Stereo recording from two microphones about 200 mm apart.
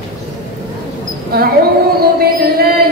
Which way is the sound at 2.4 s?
50° right (ahead or behind).